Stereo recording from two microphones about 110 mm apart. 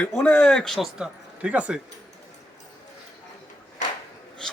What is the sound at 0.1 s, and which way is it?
Speech, 10° left (ahead or behind).